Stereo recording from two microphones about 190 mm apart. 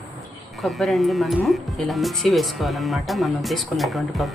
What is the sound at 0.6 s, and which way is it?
Speech, centre (ahead or behind).